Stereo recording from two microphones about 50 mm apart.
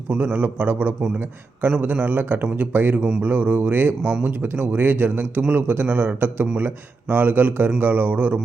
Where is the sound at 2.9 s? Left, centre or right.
Centre.